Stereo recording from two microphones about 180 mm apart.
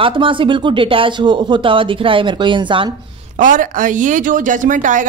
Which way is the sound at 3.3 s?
45° right (ahead or behind).